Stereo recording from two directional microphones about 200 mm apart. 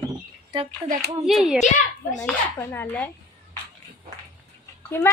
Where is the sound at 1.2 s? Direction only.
Centre (ahead or behind).